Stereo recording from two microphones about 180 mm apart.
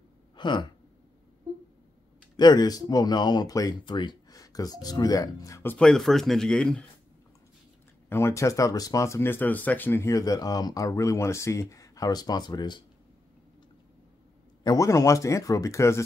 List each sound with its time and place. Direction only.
0.4 s a sound: 25° left (ahead or behind)
2.3 s speech: 25° left (ahead or behind)
5.9 s a man's voice: centre (ahead or behind)
8.1 s speech: 15° left (ahead or behind)
14.6 s speech: 20° left (ahead or behind)